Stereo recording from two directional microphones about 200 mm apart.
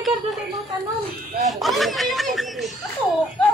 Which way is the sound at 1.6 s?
Centre (ahead or behind).